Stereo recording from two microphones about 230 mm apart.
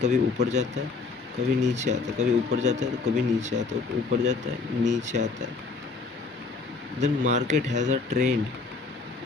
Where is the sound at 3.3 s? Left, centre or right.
Right.